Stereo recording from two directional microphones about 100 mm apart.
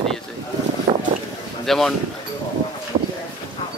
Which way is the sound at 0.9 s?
50° right (ahead or behind).